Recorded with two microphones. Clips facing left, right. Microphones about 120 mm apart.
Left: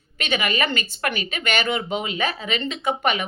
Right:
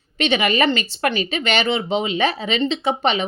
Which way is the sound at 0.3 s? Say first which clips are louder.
Right 5 dB; 35° right (ahead or behind).